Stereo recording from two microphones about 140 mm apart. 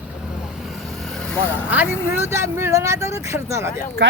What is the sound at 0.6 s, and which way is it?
Vehicle, centre (ahead or behind).